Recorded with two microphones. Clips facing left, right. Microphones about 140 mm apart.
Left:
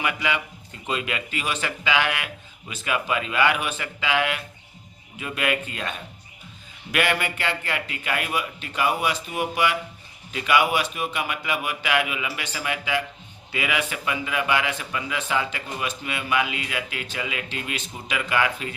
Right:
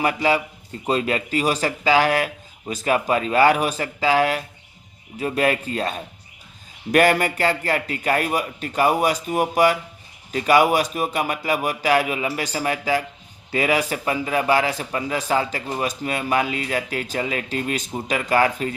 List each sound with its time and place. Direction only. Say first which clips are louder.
0.0 s a man's voice: right 6 dB; 35° right (ahead or behind)